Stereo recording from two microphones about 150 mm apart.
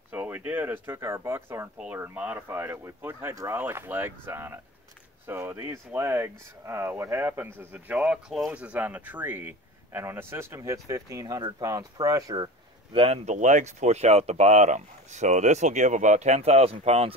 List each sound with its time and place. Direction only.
0.1 s speech: 10° right (ahead or behind)
12.9 s speech: 40° right (ahead or behind)